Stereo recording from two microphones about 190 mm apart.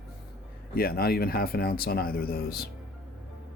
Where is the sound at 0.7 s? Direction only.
50° left (ahead or behind).